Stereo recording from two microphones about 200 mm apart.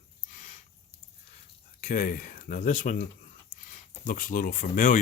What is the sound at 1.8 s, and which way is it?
Speech, 40° left (ahead or behind).